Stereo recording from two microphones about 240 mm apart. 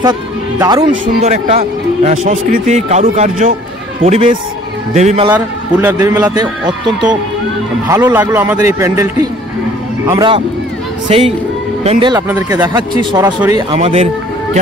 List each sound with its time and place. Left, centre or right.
0.0 s a man's voice: centre
1.0 s a man's voice: right
5.3 s a man's voice: centre
7.9 s a man's voice: centre
13.7 s a man's voice: right